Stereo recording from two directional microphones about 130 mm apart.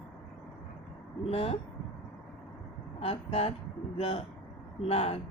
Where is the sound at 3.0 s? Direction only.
50° left (ahead or behind).